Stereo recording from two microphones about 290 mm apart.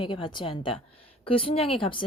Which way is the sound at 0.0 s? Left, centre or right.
Centre.